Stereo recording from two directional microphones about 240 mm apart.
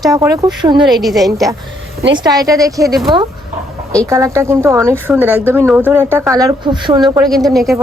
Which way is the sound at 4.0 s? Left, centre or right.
Centre.